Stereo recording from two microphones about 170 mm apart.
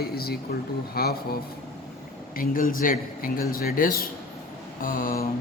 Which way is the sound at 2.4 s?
55° left (ahead or behind).